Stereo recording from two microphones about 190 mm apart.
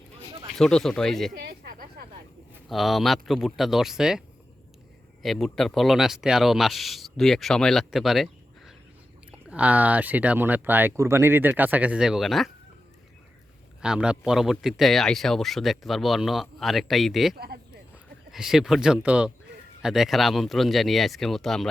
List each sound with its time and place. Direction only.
0.5 s a man's voice: centre (ahead or behind)
1.4 s a sound: 55° right (ahead or behind)
2.6 s a man's voice: centre (ahead or behind)
5.2 s a man's voice: centre (ahead or behind)
13.8 s a man's voice: 5° right (ahead or behind)
17.3 s speech: 55° right (ahead or behind)
18.3 s a man's voice: centre (ahead or behind)